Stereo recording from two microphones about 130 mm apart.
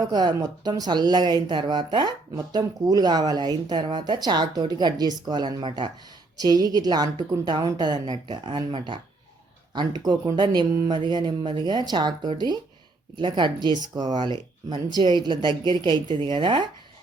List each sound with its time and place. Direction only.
0.0 s speech: 35° right (ahead or behind)